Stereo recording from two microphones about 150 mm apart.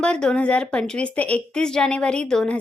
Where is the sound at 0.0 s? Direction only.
5° left (ahead or behind).